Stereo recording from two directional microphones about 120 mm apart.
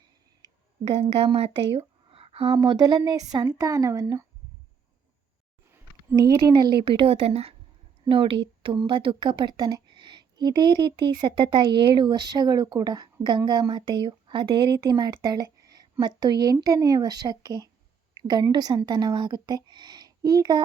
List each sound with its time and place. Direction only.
0.9 s a woman's voice: 55° right (ahead or behind)
2.6 s a woman's voice: 35° right (ahead or behind)
6.1 s speech: 35° right (ahead or behind)
6.8 s a woman's voice: 50° right (ahead or behind); by 20.6 s 30° right (ahead or behind)